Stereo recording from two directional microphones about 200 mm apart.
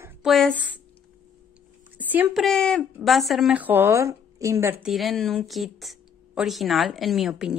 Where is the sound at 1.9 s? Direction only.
10° right (ahead or behind).